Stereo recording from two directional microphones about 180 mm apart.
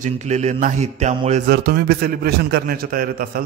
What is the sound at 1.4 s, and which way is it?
A man's voice, 55° right (ahead or behind).